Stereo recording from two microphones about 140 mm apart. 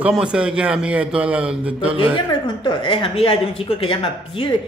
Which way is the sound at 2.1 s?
35° left (ahead or behind).